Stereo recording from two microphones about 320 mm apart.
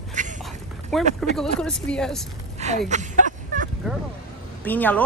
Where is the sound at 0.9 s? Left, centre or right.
Centre.